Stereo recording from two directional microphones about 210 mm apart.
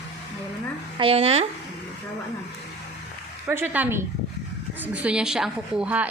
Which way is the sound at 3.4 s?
10° right (ahead or behind).